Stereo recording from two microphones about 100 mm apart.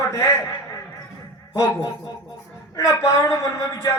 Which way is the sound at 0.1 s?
30° left (ahead or behind).